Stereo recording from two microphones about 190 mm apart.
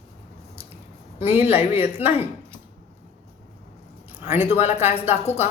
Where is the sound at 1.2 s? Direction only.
10° right (ahead or behind).